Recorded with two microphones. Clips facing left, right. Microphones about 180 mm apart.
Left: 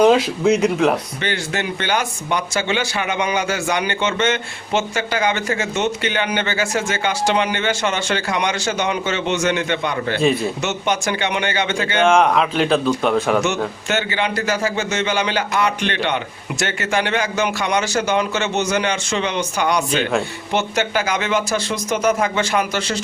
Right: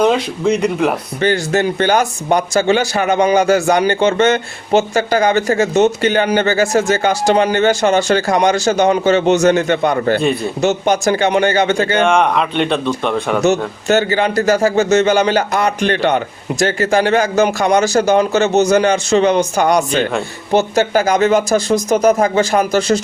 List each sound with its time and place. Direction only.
0.0 s speech: 5° left (ahead or behind)
1.2 s speech: 40° right (ahead or behind)
10.2 s speech: centre (ahead or behind)
10.6 s speech: 35° right (ahead or behind)
12.0 s speech: centre (ahead or behind)
13.8 s speech: 40° right (ahead or behind)